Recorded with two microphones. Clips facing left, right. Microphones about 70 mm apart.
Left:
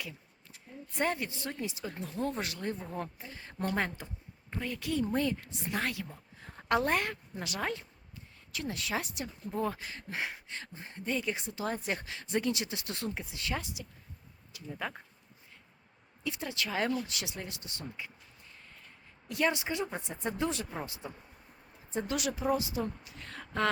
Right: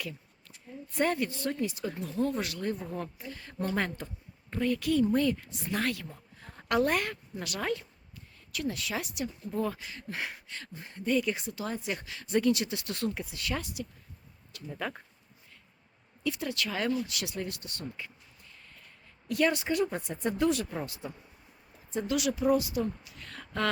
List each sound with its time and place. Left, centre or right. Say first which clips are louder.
0.9 s speech: right 4 dB; left
14.5 s speech: right 2 dB; centre
16.2 s speech: right 4 dB; left
19.3 s speech: right 3 dB; left
21.9 s a woman's voice: right 4 dB; left